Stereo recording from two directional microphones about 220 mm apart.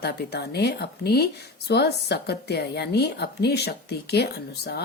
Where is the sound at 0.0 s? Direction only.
50° left (ahead or behind).